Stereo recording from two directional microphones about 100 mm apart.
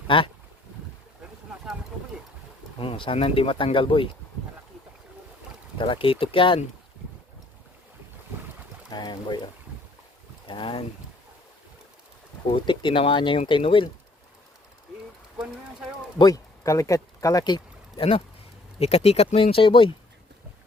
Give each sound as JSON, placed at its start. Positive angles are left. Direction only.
{"t": 0.1, "sound": "speech", "side_deg": 60}
{"t": 2.7, "sound": "speech", "side_deg": 60}
{"t": 5.7, "sound": "speech", "side_deg": 60}
{"t": 8.9, "sound": "speech", "side_deg": 45}
{"t": 10.4, "sound": "speech", "side_deg": 60}
{"t": 12.5, "sound": "speech", "side_deg": 60}
{"t": 16.1, "sound": "speech", "side_deg": 40}
{"t": 17.9, "sound": "speech", "side_deg": 70}
{"t": 18.8, "sound": "speech", "side_deg": 90}